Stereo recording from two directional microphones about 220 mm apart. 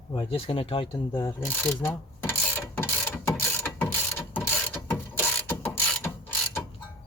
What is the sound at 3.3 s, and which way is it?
Ratchet, 5° left (ahead or behind).